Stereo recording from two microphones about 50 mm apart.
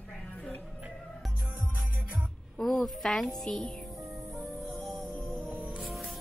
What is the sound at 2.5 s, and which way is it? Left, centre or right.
A woman's voice, centre.